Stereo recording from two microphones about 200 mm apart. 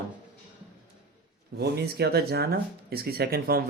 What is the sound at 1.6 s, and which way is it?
Speech, 55° right (ahead or behind).